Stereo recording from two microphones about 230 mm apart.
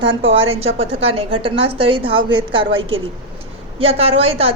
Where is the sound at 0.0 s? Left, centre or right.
Right.